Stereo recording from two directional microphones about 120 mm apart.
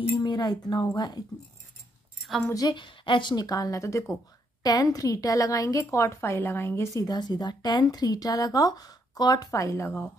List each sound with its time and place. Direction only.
0.1 s speech: 35° left (ahead or behind)
2.4 s a woman's voice: 30° left (ahead or behind)